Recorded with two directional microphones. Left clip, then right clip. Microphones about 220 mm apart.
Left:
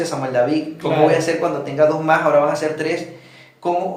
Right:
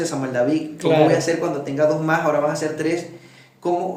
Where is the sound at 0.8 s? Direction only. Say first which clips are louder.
Right 2 dB; 50° right (ahead or behind).